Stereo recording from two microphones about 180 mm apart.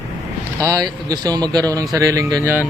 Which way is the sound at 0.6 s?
20° right (ahead or behind).